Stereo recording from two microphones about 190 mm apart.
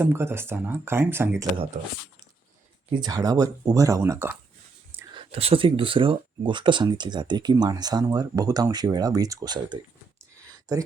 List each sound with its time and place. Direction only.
0.0 s speech: 10° right (ahead or behind)
1.7 s speech: 40° right (ahead or behind)
2.9 s speech: 20° right (ahead or behind)
5.1 s speech: 30° right (ahead or behind)